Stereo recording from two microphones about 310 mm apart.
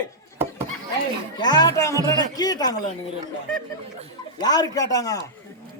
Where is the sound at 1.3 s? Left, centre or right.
Centre.